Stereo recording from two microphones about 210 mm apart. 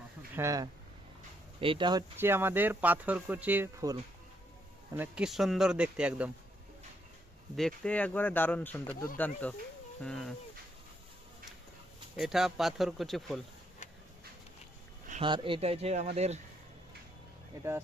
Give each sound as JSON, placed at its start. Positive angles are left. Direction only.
{"t": 0.3, "sound": "speech", "side_deg": -15}
{"t": 4.9, "sound": "speech", "side_deg": -5}
{"t": 7.5, "sound": "speech", "side_deg": 5}
{"t": 12.1, "sound": "speech", "side_deg": 0}
{"t": 15.2, "sound": "speech", "side_deg": -25}
{"t": 17.5, "sound": "speech", "side_deg": -15}